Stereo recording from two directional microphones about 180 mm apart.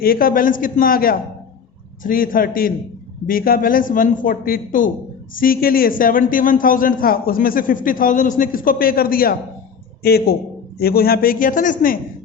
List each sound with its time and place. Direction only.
0.0 s a man's voice: 55° left (ahead or behind)